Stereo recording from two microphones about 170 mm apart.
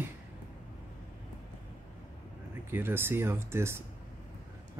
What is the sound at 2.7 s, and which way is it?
Speech, 15° right (ahead or behind).